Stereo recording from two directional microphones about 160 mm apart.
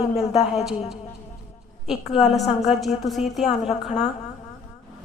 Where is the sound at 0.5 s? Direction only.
Centre (ahead or behind).